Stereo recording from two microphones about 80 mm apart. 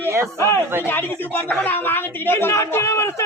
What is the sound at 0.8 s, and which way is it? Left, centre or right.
Speech, left.